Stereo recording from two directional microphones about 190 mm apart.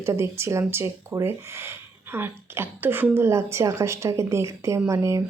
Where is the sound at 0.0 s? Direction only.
15° right (ahead or behind).